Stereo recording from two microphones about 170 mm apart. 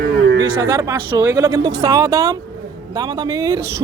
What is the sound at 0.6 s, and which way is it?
Speech, 20° right (ahead or behind).